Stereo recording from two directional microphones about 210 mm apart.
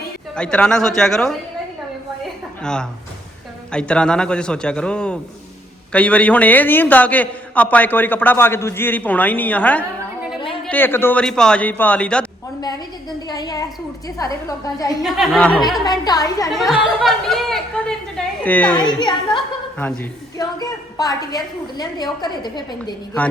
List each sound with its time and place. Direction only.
0.3 s speech: 5° left (ahead or behind)
3.7 s a man's voice: 5° left (ahead or behind)
13.2 s a woman's voice: 20° left (ahead or behind)
15.0 s speech: centre (ahead or behind)
15.6 s a woman's voice: 20° left (ahead or behind)
16.5 s a man's voice: centre (ahead or behind)
18.9 s a woman's voice: 20° left (ahead or behind)
20.4 s a woman's voice: 15° left (ahead or behind)